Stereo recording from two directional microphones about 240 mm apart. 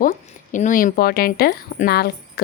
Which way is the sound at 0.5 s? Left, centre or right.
Left.